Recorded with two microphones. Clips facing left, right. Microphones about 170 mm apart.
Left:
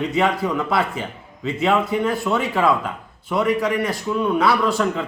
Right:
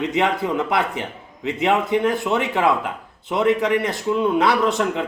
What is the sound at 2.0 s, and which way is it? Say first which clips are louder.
A man's voice: right 1 dB; 20° right (ahead or behind).